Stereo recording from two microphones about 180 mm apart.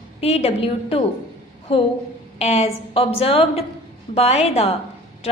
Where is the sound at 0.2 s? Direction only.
35° left (ahead or behind).